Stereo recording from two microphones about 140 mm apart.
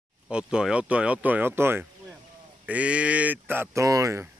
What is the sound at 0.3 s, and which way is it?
Speech, 5° right (ahead or behind).